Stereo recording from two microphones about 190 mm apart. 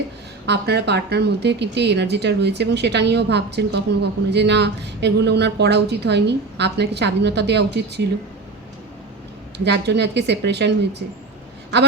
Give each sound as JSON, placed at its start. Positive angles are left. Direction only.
{"t": 0.4, "sound": "speech", "side_deg": -60}
{"t": 9.6, "sound": "speech", "side_deg": -65}